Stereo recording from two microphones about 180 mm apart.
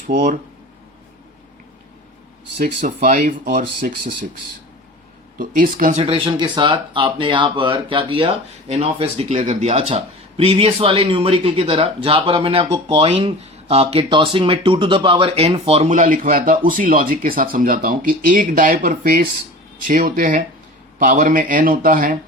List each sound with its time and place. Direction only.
0.1 s speech: 45° right (ahead or behind)
2.8 s speech: 45° right (ahead or behind)
5.4 s speech: 50° right (ahead or behind)
6.0 s speech: 30° right (ahead or behind); by 22.2 s 50° right (ahead or behind)